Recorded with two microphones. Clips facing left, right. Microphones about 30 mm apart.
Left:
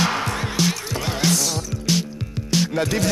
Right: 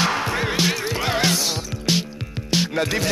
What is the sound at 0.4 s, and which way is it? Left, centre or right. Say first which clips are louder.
Music: right 2 dB; right.